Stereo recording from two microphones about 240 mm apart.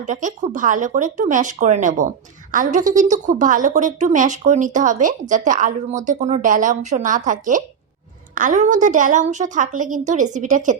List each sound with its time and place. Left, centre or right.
0.0 s speech: right